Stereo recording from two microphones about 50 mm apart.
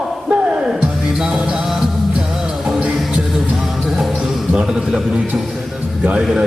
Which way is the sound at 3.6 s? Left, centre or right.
Centre.